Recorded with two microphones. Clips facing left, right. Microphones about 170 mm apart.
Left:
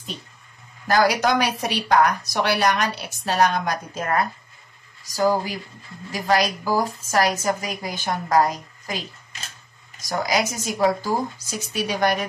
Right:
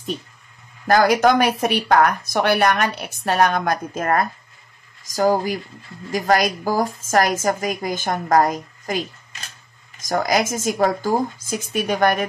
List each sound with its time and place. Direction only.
0.8 s speech: 50° right (ahead or behind)
10.0 s speech: 45° right (ahead or behind)